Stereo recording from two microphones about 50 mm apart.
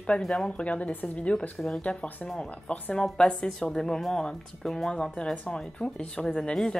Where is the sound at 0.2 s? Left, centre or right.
Centre.